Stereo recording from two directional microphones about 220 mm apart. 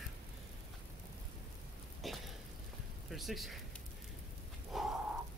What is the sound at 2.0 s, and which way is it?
Rain, centre (ahead or behind).